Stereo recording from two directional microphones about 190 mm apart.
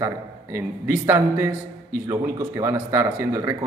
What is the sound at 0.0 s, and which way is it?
Speech, 15° right (ahead or behind).